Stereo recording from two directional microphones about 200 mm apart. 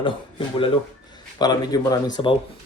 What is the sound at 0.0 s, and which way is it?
Speech, 25° left (ahead or behind).